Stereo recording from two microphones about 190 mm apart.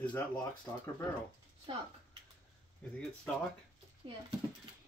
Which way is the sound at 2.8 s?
10° left (ahead or behind).